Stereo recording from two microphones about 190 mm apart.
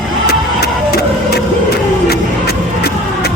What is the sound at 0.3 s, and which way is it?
Music, 55° left (ahead or behind).